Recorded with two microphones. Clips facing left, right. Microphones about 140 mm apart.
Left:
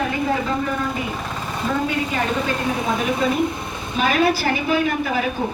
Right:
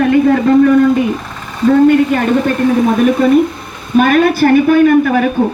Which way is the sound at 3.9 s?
55° right (ahead or behind).